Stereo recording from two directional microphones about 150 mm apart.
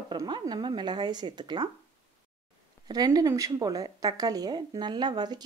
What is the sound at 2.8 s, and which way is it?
Speech, 25° right (ahead or behind).